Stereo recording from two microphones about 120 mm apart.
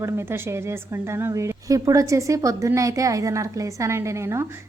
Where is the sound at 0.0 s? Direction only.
20° right (ahead or behind).